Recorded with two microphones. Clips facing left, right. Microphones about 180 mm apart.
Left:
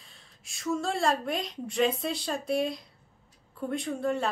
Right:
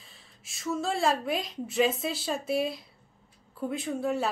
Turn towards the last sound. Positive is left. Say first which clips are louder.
# even
turn(degrees=-5)  # may be behind; listen again after turning